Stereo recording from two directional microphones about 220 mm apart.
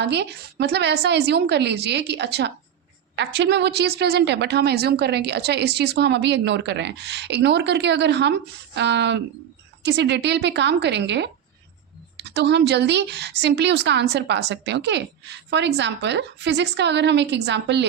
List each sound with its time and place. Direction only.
0.0 s speech: 50° right (ahead or behind)